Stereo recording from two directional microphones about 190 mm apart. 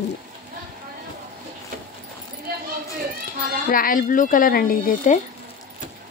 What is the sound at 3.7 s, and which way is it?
Speech, 45° left (ahead or behind).